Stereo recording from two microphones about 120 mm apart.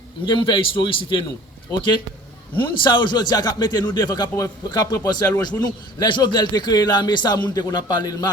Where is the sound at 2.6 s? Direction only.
40° left (ahead or behind).